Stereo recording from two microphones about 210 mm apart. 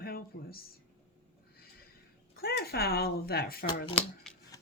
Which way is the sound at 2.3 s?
45° left (ahead or behind).